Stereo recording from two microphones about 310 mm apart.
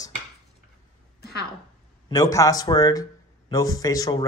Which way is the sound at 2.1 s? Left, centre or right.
Centre.